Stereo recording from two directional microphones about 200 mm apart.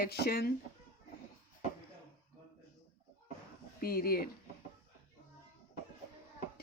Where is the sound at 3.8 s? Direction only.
50° left (ahead or behind).